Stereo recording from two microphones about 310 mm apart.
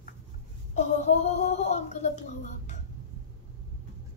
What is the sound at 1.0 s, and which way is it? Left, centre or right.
Speech, left.